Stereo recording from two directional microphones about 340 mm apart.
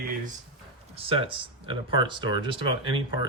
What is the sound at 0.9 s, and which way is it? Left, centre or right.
Speech, centre.